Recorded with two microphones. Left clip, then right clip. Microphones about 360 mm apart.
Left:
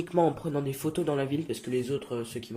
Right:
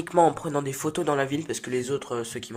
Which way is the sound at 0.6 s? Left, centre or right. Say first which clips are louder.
Right 3 dB; centre.